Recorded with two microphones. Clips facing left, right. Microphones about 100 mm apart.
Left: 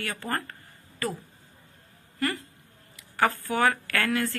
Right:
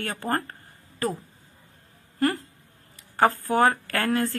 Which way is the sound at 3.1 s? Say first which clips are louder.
Right 4 dB; 30° right (ahead or behind).